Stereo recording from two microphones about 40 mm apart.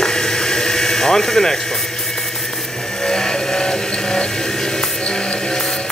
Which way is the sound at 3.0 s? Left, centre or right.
Centre.